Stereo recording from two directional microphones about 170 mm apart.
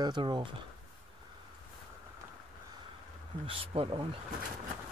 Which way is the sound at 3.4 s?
30° right (ahead or behind).